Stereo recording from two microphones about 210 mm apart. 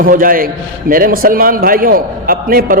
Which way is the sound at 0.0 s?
40° right (ahead or behind).